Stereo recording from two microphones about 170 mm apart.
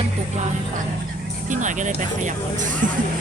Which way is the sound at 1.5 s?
45° right (ahead or behind).